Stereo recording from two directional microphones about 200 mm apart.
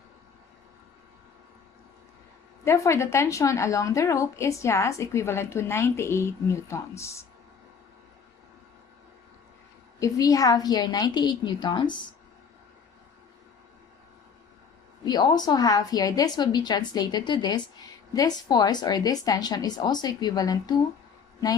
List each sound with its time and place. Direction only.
2.6 s a woman's voice: 15° left (ahead or behind)
10.0 s speech: 15° left (ahead or behind)
15.0 s speech: 20° left (ahead or behind)